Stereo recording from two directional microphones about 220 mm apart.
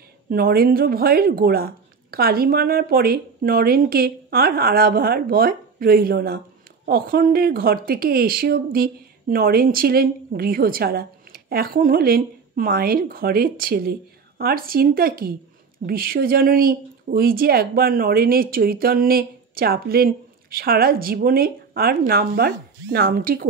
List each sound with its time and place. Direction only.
0.3 s speech: 45° right (ahead or behind)